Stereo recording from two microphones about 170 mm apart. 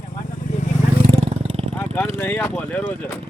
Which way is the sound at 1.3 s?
35° right (ahead or behind).